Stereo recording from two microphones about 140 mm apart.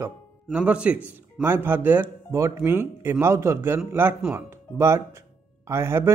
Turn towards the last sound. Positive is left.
turn(degrees=-20)  # may be behind; listen again after turning